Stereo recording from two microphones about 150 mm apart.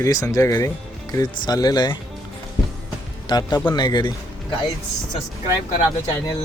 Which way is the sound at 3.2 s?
30° left (ahead or behind).